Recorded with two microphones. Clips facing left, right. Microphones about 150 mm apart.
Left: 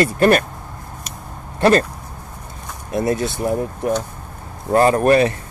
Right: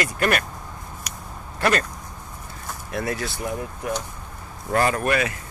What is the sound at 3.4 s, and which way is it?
Speech, 40° left (ahead or behind).